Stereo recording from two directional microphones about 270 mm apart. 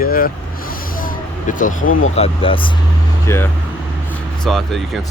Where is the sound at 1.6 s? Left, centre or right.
Left; by 5.0 s centre.